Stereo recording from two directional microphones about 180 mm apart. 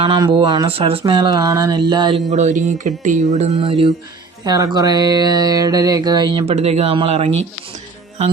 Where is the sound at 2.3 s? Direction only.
40° right (ahead or behind).